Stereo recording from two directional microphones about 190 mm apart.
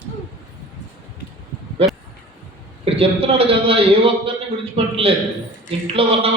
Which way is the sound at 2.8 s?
30° right (ahead or behind).